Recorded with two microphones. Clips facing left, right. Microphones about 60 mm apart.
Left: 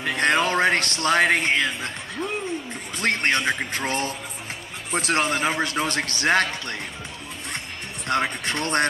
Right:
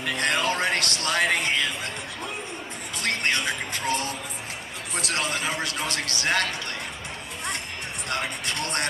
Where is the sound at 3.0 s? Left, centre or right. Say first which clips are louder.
Left 4 dB; left.